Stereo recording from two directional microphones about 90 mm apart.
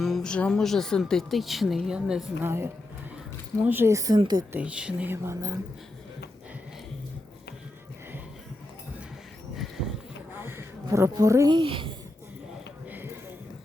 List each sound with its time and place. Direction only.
0.0 s speech: 5° left (ahead or behind)
2.4 s speech: 25° right (ahead or behind)
3.8 s a woman's voice: 40° right (ahead or behind)
4.5 s speech: 10° right (ahead or behind)
5.0 s speech: 30° right (ahead or behind)
10.3 s a sound: 25° right (ahead or behind)
10.8 s a woman's voice: 35° right (ahead or behind)
11.6 s speech: 75° right (ahead or behind)